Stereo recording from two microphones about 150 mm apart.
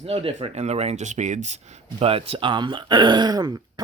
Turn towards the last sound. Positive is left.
turn(degrees=-25)  # may be behind; listen again after turning